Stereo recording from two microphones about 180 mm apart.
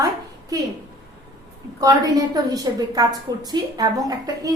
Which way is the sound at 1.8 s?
20° right (ahead or behind).